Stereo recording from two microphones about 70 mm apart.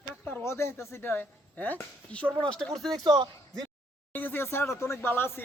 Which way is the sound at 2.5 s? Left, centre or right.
Centre.